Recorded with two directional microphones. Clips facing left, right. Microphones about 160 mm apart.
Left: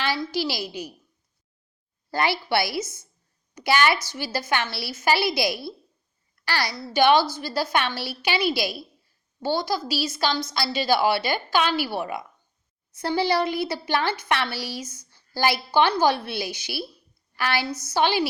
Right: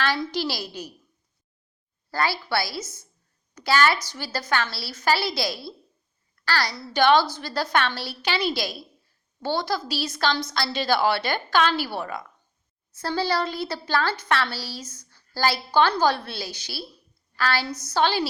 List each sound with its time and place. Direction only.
0.2 s a woman's voice: 10° left (ahead or behind)
2.0 s a woman's voice: 20° left (ahead or behind)